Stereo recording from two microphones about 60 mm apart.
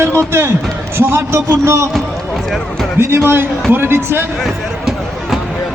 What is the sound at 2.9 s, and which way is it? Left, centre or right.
A man's voice, right.